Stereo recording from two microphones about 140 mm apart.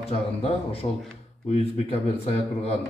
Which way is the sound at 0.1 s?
45° left (ahead or behind).